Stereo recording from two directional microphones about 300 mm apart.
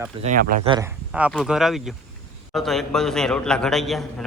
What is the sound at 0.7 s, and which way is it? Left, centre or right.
A man's voice, centre.